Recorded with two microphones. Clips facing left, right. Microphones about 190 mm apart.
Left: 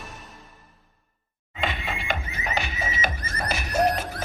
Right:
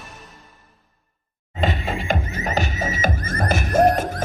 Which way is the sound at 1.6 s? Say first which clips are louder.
Right 6 dB; 40° right (ahead or behind).